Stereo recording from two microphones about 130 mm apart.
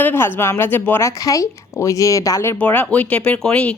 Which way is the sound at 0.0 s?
15° left (ahead or behind).